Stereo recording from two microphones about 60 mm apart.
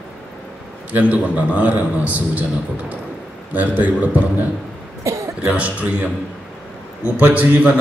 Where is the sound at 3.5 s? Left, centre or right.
Right.